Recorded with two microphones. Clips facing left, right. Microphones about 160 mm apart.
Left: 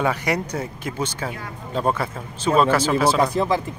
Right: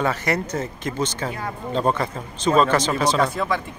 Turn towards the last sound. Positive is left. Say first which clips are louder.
# left 3 dB
turn(degrees=35)  # may be behind; listen again after turning